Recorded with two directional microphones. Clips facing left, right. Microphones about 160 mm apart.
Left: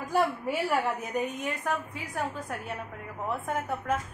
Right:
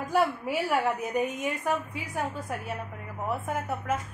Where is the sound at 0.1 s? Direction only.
5° right (ahead or behind).